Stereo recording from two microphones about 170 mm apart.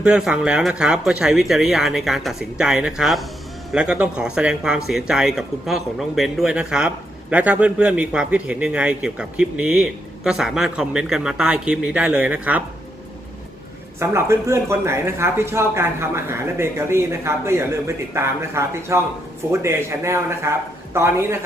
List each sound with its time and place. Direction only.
0.0 s speech: 5° right (ahead or behind)
14.0 s speech: 15° right (ahead or behind)